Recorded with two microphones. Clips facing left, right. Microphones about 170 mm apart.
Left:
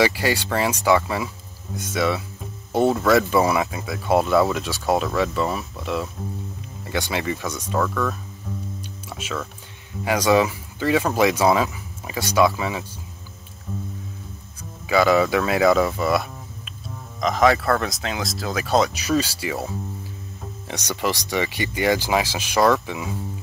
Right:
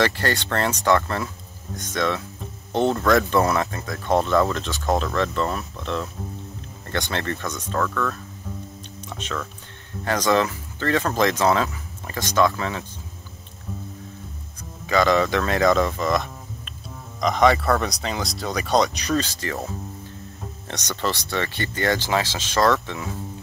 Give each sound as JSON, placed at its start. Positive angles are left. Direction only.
{"t": 0.0, "sound": "speech", "side_deg": 10}
{"t": 8.5, "sound": "music", "side_deg": 0}
{"t": 9.1, "sound": "speech", "side_deg": 5}
{"t": 14.6, "sound": "speech", "side_deg": 5}